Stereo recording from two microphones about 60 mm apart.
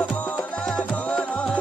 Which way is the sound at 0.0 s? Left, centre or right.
Left.